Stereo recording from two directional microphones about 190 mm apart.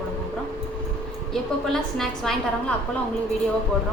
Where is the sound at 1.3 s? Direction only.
Centre (ahead or behind).